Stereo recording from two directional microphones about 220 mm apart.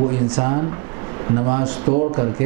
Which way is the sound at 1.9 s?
30° right (ahead or behind).